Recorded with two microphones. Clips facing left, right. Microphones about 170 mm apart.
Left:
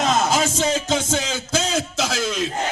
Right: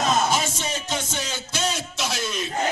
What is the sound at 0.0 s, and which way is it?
Music, 90° left.